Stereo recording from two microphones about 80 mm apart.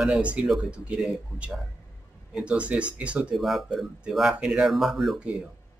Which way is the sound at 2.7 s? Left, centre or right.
Centre.